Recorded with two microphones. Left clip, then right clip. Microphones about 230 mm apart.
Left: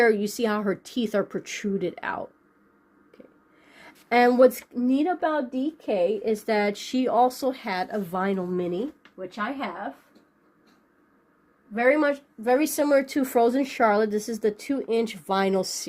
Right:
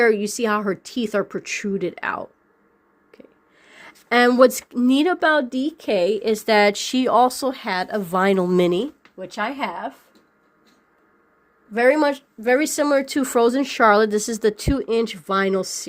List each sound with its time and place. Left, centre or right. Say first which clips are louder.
0.0 s speech: right 3 dB; centre
8.5 s speech: right 9 dB; right
11.7 s speech: right 4 dB; right
12.4 s speech: right 4 dB; right